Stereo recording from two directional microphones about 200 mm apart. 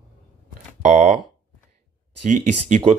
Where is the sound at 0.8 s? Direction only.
35° right (ahead or behind).